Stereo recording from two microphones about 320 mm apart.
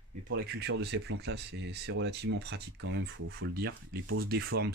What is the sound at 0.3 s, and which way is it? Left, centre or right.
Speech, right.